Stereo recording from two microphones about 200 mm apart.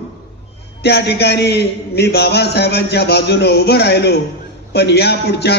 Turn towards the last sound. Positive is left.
turn(degrees=55)  # may be behind; listen again after turning